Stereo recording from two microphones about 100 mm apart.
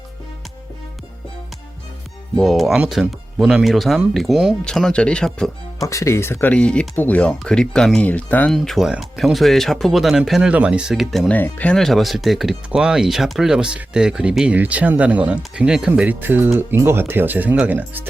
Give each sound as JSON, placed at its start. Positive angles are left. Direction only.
{"t": 2.4, "sound": "speech", "side_deg": 0}
{"t": 5.8, "sound": "speech", "side_deg": 30}
{"t": 6.5, "sound": "speech", "side_deg": 10}
{"t": 8.5, "sound": "speech", "side_deg": 0}
{"t": 15.9, "sound": "speech", "side_deg": -20}